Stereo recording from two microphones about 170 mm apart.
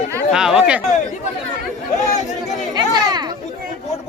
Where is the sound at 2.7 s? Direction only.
25° right (ahead or behind).